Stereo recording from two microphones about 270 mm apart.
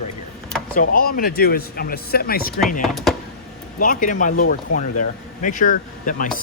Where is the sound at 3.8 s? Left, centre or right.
Left.